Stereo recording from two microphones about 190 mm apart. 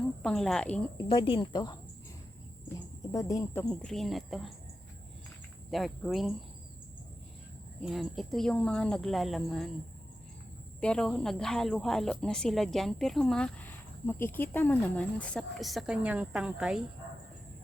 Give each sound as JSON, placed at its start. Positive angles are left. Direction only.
{"t": 0.2, "sound": "speech", "side_deg": 0}
{"t": 0.9, "sound": "speech", "side_deg": 25}
{"t": 2.7, "sound": "a sound", "side_deg": 20}
{"t": 3.7, "sound": "speech", "side_deg": 0}
{"t": 5.7, "sound": "speech", "side_deg": 0}
{"t": 7.9, "sound": "speech", "side_deg": 0}
{"t": 10.8, "sound": "speech", "side_deg": 5}